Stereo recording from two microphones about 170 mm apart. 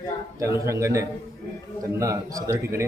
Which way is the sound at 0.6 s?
15° right (ahead or behind).